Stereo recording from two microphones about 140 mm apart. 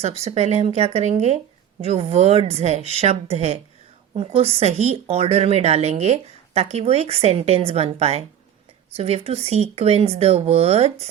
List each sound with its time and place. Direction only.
0.0 s a woman's voice: 50° right (ahead or behind)